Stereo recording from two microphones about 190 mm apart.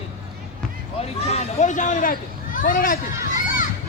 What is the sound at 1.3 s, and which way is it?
A man's voice, 35° left (ahead or behind).